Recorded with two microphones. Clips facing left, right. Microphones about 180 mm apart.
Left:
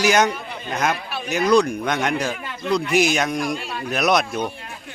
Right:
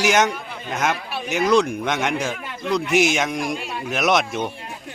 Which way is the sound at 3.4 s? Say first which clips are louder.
Left 1 dB; 20° right (ahead or behind).